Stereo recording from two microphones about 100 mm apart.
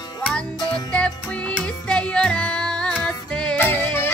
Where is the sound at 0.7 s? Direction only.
10° left (ahead or behind).